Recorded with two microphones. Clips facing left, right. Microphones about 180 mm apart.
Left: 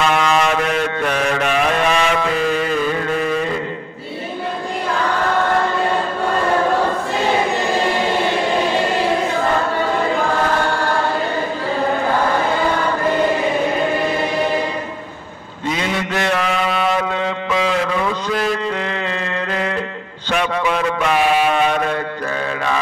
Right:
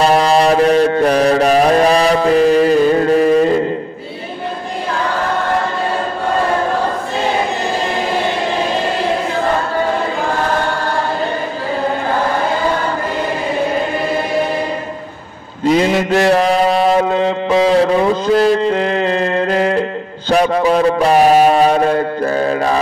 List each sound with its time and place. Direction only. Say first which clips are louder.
0.0 s mantra: right 5 dB; 35° right (ahead or behind)
15.7 s mantra: right 9 dB; 35° right (ahead or behind)